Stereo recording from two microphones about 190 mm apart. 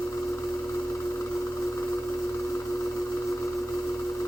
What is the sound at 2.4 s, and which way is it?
Vehicle, 15° left (ahead or behind).